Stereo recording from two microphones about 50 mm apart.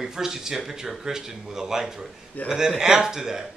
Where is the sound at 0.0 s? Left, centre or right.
Centre.